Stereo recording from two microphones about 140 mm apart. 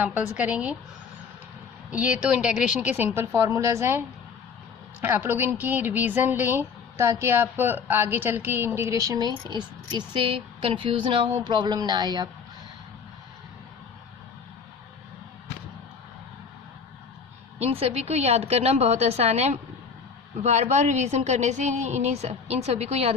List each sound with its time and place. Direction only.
0.0 s a woman's voice: 10° right (ahead or behind)
1.9 s a woman's voice: 10° right (ahead or behind); by 12.3 s 30° right (ahead or behind)
17.6 s a woman's voice: 45° right (ahead or behind)